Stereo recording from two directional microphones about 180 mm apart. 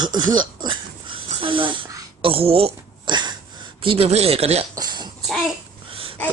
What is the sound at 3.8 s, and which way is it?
Speech, 30° right (ahead or behind).